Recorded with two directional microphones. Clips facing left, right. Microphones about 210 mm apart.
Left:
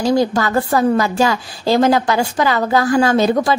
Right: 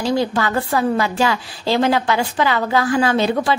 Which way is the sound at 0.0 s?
40° left (ahead or behind).